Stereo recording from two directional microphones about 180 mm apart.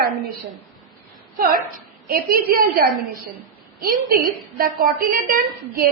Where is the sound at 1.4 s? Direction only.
55° right (ahead or behind).